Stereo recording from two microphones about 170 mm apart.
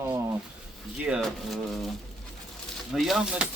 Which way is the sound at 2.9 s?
Centre (ahead or behind).